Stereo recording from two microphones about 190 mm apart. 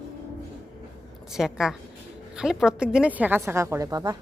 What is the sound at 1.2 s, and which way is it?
A woman's voice, centre (ahead or behind).